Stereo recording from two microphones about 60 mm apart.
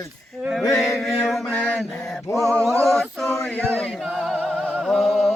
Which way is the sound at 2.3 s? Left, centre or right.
Left.